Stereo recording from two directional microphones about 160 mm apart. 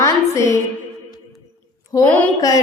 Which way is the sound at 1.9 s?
20° left (ahead or behind).